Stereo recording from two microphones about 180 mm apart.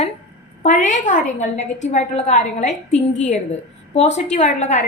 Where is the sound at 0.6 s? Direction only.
45° left (ahead or behind).